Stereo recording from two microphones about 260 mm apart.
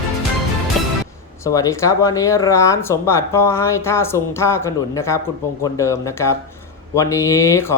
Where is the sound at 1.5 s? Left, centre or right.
Centre.